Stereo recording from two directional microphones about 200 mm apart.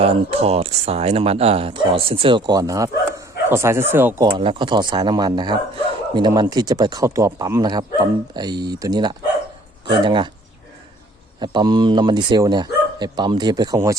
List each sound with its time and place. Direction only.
0.0 s speech: 30° right (ahead or behind)
11.3 s speech: 20° right (ahead or behind)